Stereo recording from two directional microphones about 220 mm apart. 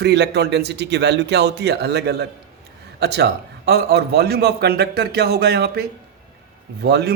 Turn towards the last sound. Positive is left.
turn(degrees=-50)  # may be behind; listen again after turning